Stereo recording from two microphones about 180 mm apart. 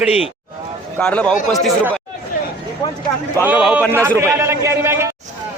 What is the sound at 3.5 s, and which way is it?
Speech, 5° right (ahead or behind).